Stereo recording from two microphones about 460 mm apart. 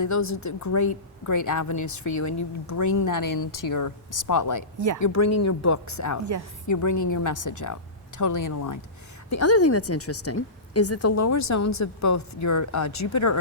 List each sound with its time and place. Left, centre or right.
0.0 s a woman's voice: left